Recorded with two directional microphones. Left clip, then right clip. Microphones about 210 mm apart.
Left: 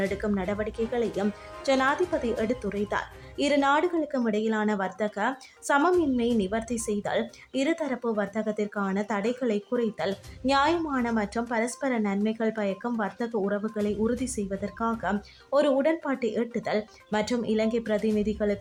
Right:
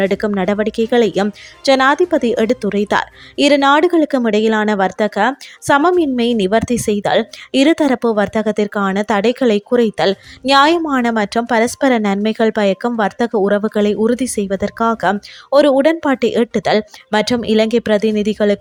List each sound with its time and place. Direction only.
0.0 s speech: 40° right (ahead or behind)